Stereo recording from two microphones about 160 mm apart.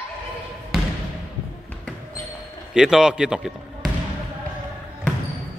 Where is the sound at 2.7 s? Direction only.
5° right (ahead or behind).